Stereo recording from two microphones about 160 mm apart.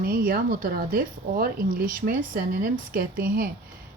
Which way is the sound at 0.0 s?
65° right (ahead or behind).